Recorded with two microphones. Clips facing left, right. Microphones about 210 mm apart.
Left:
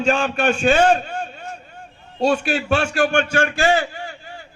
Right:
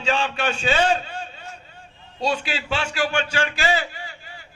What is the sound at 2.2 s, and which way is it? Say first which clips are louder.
A man's voice: left 6 dB; 50° left (ahead or behind).